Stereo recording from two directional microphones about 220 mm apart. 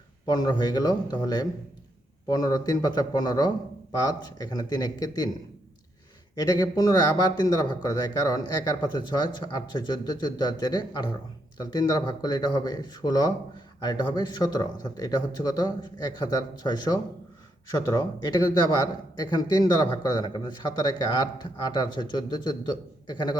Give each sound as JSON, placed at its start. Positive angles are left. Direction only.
{"t": 0.3, "sound": "speech", "side_deg": 20}
{"t": 6.4, "sound": "speech", "side_deg": 15}